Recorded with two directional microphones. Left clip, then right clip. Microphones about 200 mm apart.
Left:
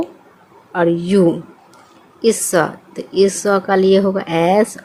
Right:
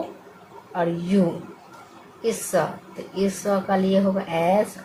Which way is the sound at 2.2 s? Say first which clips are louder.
Left 8 dB; 50° left (ahead or behind).